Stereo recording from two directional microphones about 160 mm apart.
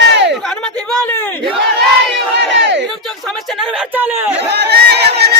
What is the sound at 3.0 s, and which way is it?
Speech, centre (ahead or behind).